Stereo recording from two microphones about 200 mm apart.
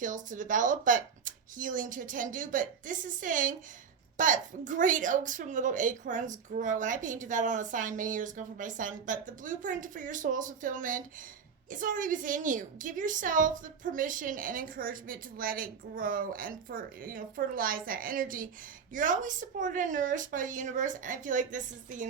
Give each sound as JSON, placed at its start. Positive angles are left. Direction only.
{"t": 0.0, "sound": "a woman's voice", "side_deg": -40}